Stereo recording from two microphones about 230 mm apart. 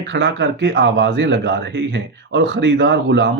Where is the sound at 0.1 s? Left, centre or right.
Right.